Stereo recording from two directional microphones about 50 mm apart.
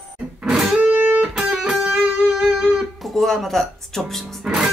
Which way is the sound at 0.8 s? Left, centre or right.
Right.